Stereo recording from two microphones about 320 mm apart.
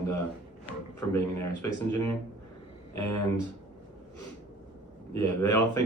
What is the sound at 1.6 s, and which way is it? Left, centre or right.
Speech, centre.